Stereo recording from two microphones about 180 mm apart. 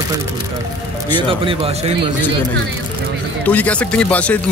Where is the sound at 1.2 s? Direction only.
30° right (ahead or behind).